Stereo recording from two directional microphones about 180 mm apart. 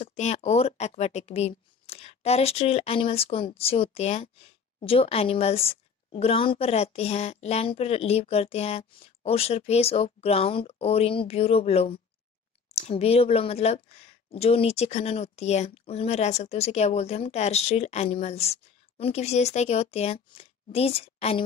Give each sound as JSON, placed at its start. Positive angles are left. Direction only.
{"t": 0.0, "sound": "speech", "side_deg": 35}